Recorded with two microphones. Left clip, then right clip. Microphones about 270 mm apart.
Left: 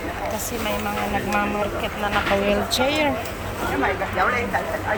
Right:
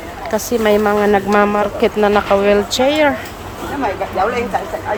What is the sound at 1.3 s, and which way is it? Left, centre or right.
Speech, right.